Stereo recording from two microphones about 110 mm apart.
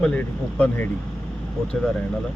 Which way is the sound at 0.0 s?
10° left (ahead or behind).